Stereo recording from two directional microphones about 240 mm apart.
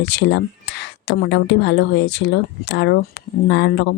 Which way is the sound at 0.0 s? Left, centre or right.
Left.